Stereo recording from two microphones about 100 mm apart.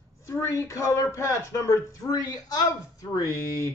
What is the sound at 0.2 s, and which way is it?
Speech, 30° left (ahead or behind).